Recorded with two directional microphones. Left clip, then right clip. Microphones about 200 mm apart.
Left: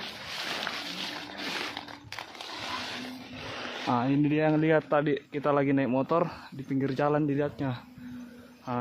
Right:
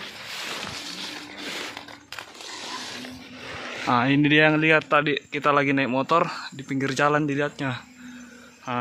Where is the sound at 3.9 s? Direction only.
5° right (ahead or behind).